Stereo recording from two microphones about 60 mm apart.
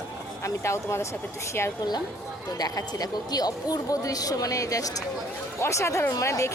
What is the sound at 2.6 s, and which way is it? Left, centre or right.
Speech, left.